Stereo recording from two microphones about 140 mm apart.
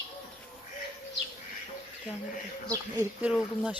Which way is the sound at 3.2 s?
5° right (ahead or behind).